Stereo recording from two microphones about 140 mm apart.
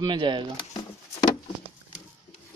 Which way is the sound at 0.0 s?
35° right (ahead or behind).